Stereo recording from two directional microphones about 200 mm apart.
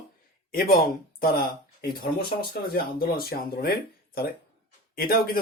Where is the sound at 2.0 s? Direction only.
50° left (ahead or behind).